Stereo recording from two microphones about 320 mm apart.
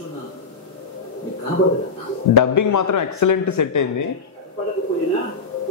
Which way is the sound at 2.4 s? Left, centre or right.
Left.